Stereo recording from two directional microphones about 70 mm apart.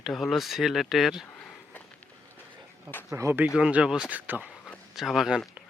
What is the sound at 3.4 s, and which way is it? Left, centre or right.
Speech, centre.